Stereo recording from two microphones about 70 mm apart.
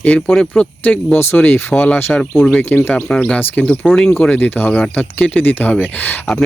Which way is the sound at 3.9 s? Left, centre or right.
Centre.